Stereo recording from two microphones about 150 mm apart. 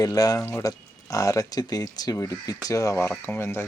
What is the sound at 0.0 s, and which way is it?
Speech, 25° left (ahead or behind).